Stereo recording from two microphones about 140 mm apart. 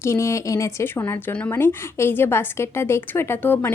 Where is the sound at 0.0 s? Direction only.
20° left (ahead or behind).